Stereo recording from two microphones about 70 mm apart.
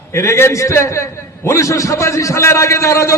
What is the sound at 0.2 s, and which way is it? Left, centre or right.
A man's voice, left.